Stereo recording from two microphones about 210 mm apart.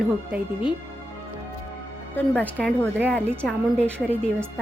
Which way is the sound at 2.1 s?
5° left (ahead or behind).